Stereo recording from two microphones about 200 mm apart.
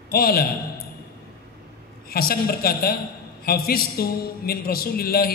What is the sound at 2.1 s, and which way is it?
A man's voice, 50° left (ahead or behind).